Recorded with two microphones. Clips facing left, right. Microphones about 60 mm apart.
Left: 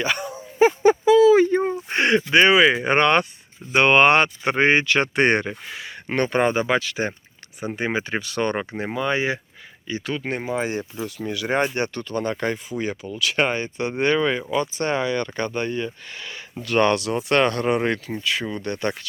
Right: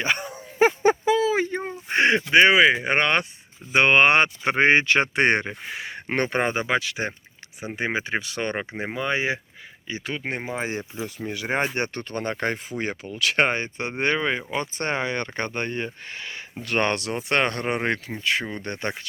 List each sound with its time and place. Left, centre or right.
0.0 s speech: right
0.9 s a sound: right
1.5 s a sound: centre
2.0 s speech: centre
3.7 s speech: centre
5.1 s speech: centre
5.7 s speech: right
6.1 s speech: centre
14.5 s speech: right
16.1 s speech: right